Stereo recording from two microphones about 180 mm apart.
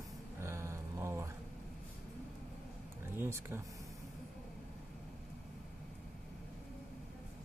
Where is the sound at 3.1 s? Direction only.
15° right (ahead or behind).